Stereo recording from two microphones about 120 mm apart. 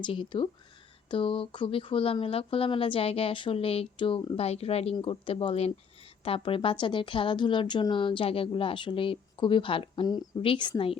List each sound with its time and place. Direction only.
0.0 s a woman's voice: 40° left (ahead or behind)
4.9 s a woman's voice: 45° left (ahead or behind)